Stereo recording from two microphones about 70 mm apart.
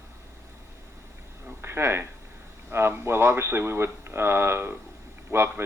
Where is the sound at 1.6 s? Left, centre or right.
Right.